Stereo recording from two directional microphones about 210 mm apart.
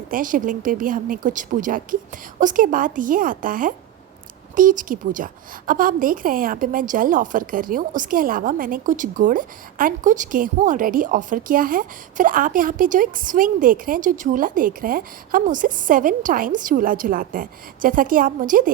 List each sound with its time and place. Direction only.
0.1 s a woman's voice: 40° right (ahead or behind)